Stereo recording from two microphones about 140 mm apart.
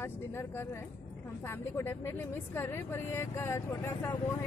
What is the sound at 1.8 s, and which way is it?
Speech, 15° left (ahead or behind).